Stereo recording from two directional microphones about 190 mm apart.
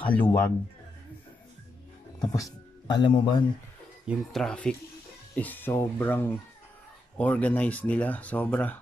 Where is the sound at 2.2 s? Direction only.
20° left (ahead or behind).